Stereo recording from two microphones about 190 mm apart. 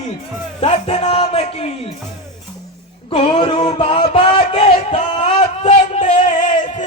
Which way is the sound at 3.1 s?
25° left (ahead or behind).